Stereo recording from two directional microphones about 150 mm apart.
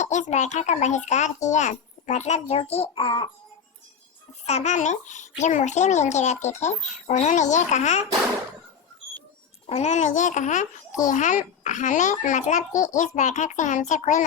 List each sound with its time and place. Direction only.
0.0 s a child's voice: 50° left (ahead or behind); by 3.2 s 35° left (ahead or behind)
4.4 s a child's voice: 50° left (ahead or behind)
9.6 s a child's voice: 50° left (ahead or behind)